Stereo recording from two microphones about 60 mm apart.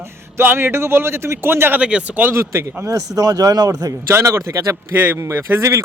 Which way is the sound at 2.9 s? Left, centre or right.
Right.